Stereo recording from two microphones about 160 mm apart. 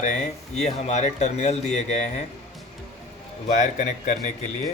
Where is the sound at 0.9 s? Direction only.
45° left (ahead or behind).